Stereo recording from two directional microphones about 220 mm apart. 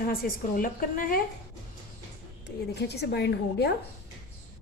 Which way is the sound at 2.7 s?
50° left (ahead or behind).